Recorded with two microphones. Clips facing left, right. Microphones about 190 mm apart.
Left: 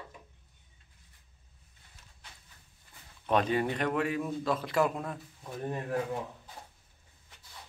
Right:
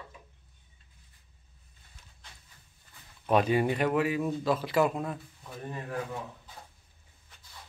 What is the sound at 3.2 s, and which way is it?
A man's voice, 10° right (ahead or behind).